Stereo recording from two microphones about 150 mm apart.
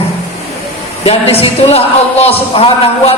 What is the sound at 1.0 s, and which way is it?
A man's voice, 40° left (ahead or behind).